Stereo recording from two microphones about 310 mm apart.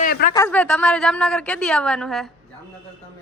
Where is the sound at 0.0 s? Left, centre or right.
Left.